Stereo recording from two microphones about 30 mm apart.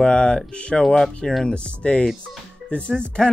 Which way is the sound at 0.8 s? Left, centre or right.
Centre.